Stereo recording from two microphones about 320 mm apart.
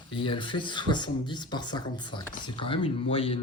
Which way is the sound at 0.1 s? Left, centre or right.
Centre.